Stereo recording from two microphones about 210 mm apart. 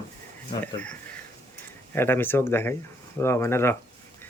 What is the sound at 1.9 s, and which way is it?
Speech, 10° left (ahead or behind).